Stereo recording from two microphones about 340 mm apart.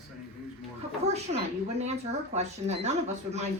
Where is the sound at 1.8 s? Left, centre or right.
Centre.